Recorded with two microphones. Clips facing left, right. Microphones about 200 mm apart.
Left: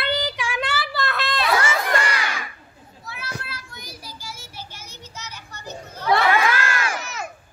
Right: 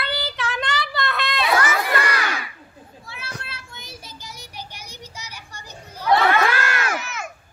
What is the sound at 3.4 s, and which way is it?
Child singing, 25° right (ahead or behind).